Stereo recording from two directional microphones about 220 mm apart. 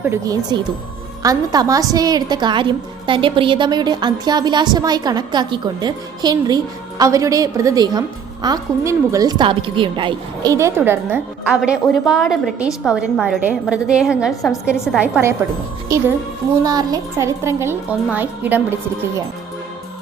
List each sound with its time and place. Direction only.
0.0 s a woman's voice: 15° right (ahead or behind)